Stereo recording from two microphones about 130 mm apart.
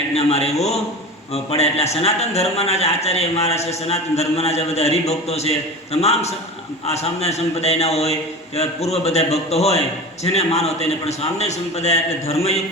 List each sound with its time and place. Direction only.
0.1 s a man's voice: 55° left (ahead or behind)